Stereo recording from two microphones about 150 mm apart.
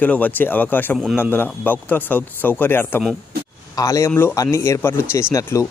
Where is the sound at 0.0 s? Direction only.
10° left (ahead or behind).